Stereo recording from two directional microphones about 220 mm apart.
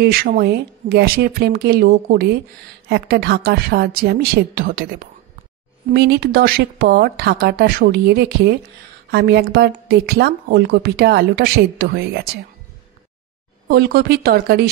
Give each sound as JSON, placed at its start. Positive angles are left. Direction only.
{"t": 0.0, "sound": "a woman's voice", "side_deg": -40}
{"t": 13.7, "sound": "a woman's voice", "side_deg": -45}